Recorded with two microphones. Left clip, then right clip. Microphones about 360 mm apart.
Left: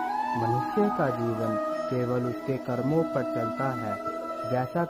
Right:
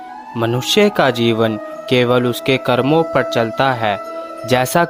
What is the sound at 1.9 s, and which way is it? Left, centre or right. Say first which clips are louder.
Speech: right 14 dB; right.